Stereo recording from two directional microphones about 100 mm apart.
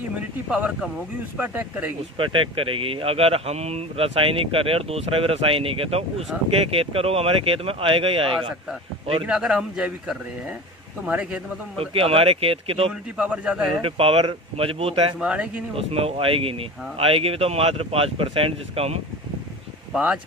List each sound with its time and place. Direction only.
0.2 s speech: 10° right (ahead or behind)
2.1 s speech: 60° right (ahead or behind); by 6.2 s 85° right
6.5 s speech: 70° right (ahead or behind)
9.2 s speech: 10° right (ahead or behind)
11.8 s speech: 70° right (ahead or behind)
12.9 s speech: 10° right (ahead or behind)
13.8 s speech: 70° right (ahead or behind)
15.2 s speech: 10° right (ahead or behind)
15.7 s speech: 80° right
19.9 s speech: 15° right (ahead or behind)